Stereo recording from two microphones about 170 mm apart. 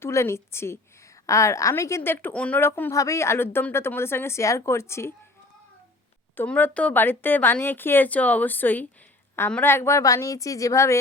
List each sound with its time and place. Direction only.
0.0 s a woman's voice: 15° left (ahead or behind)
6.3 s a woman's voice: 10° left (ahead or behind)